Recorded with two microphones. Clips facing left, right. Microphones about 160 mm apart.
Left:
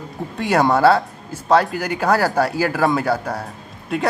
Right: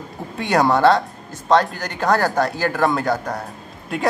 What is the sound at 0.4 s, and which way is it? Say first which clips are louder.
Speech: left 1 dB; centre (ahead or behind).